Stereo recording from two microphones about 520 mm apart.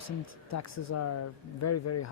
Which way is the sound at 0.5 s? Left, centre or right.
Left.